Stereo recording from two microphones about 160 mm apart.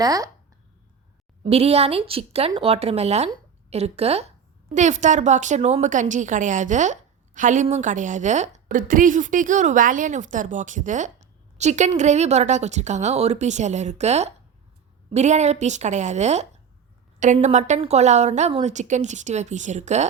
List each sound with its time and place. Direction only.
0.0 s speech: 20° right (ahead or behind)
1.5 s a woman's voice: 40° right (ahead or behind)
8.7 s a woman's voice: 60° right (ahead or behind)